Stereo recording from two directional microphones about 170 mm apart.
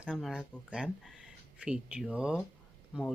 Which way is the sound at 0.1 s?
Centre (ahead or behind).